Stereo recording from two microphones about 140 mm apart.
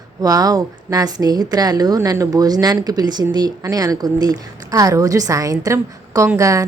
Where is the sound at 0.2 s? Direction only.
25° right (ahead or behind).